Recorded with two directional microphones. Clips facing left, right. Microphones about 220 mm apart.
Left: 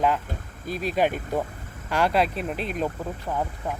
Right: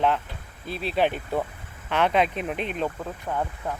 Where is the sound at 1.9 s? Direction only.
10° left (ahead or behind).